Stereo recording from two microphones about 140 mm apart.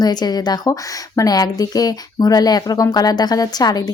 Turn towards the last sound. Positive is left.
turn(degrees=30)  # may be behind; listen again after turning